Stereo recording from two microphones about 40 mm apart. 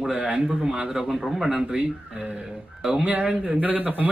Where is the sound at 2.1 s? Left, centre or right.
Right.